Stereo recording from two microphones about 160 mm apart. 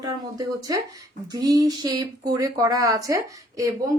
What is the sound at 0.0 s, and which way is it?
A woman's voice, 20° right (ahead or behind).